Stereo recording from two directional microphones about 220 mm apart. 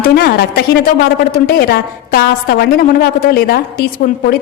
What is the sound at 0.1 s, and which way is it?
A woman's voice, 45° left (ahead or behind).